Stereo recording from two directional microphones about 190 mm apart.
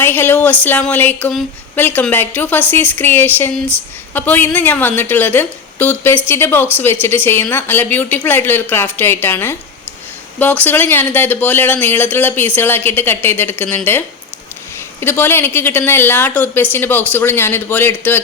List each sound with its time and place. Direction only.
0.0 s speech: 10° left (ahead or behind)
15.0 s speech: 10° left (ahead or behind)